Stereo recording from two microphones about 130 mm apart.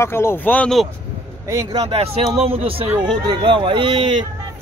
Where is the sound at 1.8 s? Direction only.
50° right (ahead or behind).